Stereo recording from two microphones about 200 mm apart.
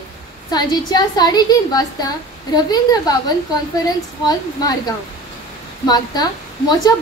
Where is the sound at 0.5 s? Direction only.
20° left (ahead or behind).